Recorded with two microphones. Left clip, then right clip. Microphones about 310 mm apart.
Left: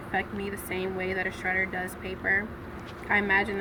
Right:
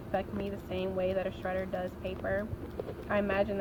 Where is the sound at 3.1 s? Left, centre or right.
Left.